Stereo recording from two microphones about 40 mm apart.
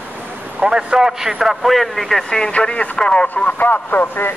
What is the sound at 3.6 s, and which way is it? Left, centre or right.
Speech, left.